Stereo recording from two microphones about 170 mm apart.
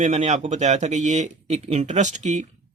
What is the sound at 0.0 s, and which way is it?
Speech, 45° right (ahead or behind).